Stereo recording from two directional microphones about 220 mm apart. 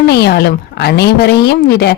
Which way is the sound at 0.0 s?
45° left (ahead or behind).